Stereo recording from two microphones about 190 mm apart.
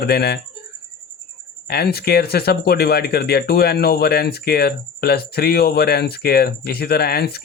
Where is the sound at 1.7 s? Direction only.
55° left (ahead or behind).